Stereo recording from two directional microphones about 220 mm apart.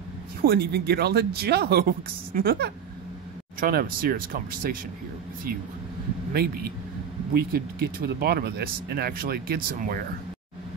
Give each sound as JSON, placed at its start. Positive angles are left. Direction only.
{"t": 0.4, "sound": "speech", "side_deg": -45}
{"t": 6.3, "sound": "speech", "side_deg": -45}